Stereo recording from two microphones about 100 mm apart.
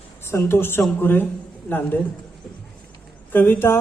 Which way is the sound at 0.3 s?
25° left (ahead or behind).